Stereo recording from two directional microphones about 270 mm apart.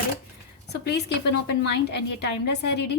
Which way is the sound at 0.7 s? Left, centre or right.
Left.